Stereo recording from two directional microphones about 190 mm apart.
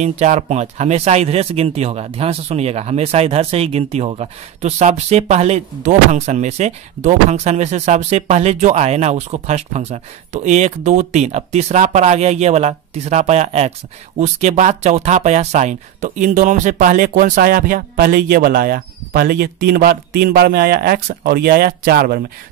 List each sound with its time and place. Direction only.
0.0 s speech: 35° right (ahead or behind)